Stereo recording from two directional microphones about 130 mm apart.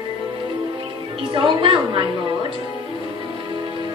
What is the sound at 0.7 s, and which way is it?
A woman's voice, 40° right (ahead or behind).